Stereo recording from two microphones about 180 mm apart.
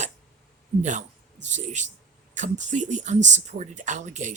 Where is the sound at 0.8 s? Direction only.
40° right (ahead or behind).